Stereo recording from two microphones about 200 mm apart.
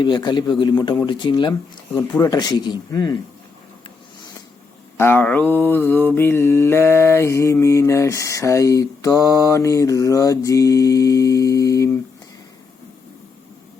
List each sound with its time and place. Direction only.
0.0 s speech: 20° left (ahead or behind)
4.9 s mantra: 10° left (ahead or behind)